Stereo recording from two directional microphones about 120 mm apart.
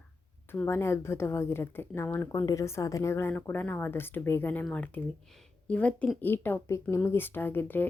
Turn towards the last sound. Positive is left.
turn(degrees=15)  # may be behind; listen again after turning